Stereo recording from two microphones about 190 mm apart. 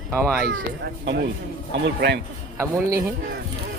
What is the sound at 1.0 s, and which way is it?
Speech, 60° right (ahead or behind).